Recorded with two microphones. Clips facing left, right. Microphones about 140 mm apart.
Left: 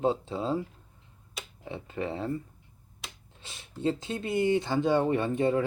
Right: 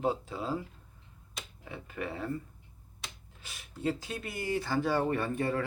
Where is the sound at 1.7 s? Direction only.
25° left (ahead or behind).